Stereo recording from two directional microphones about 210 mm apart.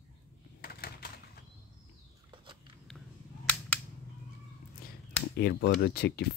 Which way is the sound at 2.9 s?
Centre (ahead or behind).